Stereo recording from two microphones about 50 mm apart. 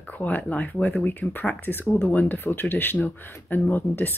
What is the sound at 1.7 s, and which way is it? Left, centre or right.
Speech, left.